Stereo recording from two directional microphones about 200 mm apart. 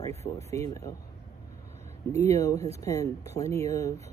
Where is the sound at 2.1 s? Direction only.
15° left (ahead or behind).